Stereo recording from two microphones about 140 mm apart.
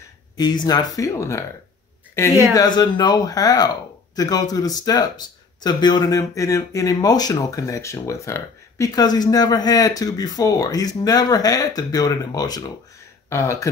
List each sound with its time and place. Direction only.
0.4 s speech: 30° left (ahead or behind)
2.5 s speech: 30° left (ahead or behind)